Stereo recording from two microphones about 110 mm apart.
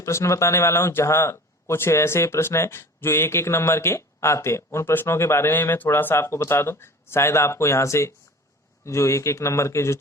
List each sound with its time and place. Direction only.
0.0 s speech: 25° left (ahead or behind)